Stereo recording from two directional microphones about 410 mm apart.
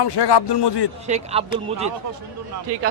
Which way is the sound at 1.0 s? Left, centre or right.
Centre.